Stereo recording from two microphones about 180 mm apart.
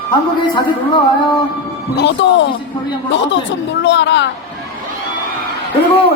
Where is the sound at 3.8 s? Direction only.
80° left.